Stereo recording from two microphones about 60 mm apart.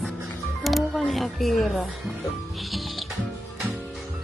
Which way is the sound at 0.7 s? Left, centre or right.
Centre.